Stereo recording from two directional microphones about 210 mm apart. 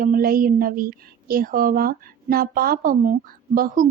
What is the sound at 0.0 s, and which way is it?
Speech, 40° right (ahead or behind).